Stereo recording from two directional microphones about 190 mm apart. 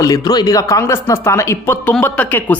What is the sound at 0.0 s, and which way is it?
Speech, 20° left (ahead or behind).